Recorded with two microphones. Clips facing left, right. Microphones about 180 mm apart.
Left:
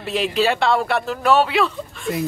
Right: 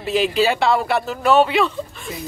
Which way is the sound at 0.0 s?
Centre (ahead or behind).